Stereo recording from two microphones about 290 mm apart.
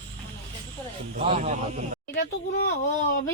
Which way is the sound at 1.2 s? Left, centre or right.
Right.